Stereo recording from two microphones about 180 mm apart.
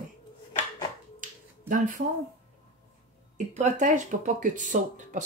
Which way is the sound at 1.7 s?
45° right (ahead or behind).